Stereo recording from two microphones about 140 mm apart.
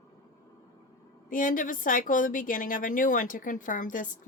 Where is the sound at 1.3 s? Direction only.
75° left (ahead or behind).